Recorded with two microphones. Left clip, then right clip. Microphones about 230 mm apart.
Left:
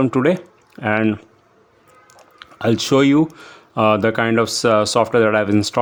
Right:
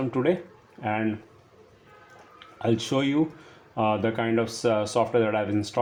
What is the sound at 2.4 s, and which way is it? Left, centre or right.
Speech, left.